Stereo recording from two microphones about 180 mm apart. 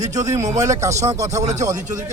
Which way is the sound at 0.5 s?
15° right (ahead or behind).